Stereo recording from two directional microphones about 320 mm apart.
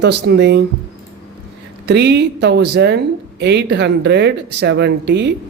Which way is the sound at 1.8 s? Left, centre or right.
Right.